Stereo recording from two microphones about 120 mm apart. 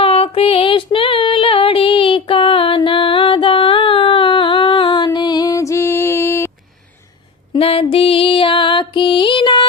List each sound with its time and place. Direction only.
0.0 s female singing: 55° left (ahead or behind); by 6.5 s 20° left (ahead or behind)
7.5 s music: 50° left (ahead or behind)